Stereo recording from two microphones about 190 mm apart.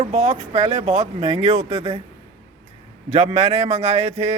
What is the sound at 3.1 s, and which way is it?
Speech, 30° right (ahead or behind).